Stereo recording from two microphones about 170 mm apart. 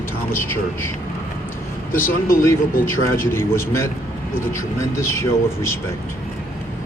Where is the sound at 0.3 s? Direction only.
15° left (ahead or behind).